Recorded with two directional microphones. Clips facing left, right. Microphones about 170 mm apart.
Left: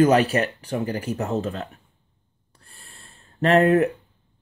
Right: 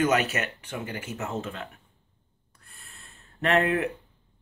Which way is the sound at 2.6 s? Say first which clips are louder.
Left 3 dB; 30° left (ahead or behind).